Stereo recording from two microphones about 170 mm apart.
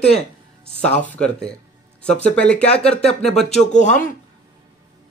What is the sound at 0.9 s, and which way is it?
Speech, 5° left (ahead or behind).